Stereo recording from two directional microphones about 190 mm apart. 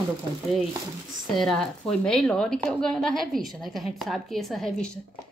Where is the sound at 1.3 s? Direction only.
Centre (ahead or behind).